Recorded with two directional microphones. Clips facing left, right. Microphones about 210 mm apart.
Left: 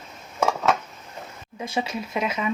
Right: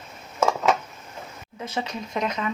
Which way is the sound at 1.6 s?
10° left (ahead or behind).